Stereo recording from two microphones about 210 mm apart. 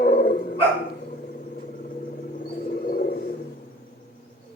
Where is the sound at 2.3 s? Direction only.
45° left (ahead or behind).